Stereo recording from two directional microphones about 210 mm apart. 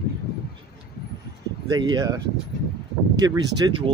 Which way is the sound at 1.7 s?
20° right (ahead or behind).